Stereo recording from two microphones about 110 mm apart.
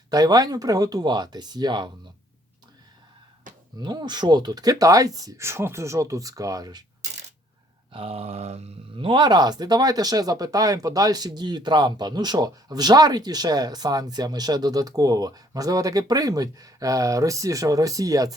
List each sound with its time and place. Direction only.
0.1 s speech: 35° right (ahead or behind)
3.8 s speech: 40° right (ahead or behind)
7.9 s a sound: 60° right (ahead or behind)
9.0 s speech: 45° right (ahead or behind)